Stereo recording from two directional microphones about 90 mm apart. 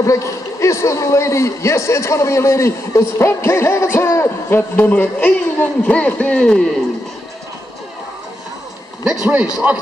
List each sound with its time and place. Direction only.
0.0 s a man's voice: 35° left (ahead or behind); by 6.6 s 10° left (ahead or behind)
9.0 s a man's voice: 5° right (ahead or behind)